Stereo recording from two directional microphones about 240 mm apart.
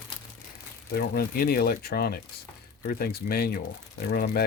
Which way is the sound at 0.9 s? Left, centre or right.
Left.